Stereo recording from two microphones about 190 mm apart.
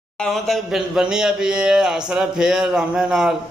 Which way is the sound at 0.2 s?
Centre (ahead or behind).